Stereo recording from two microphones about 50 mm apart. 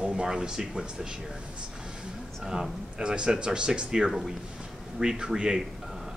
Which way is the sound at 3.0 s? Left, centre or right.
Centre.